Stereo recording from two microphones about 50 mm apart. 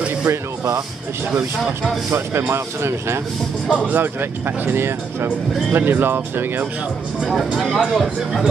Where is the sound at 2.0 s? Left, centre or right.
Right.